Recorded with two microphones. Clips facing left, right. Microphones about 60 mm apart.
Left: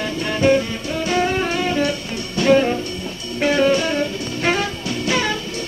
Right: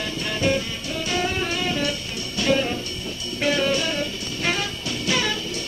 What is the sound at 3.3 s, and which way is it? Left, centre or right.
Music, left.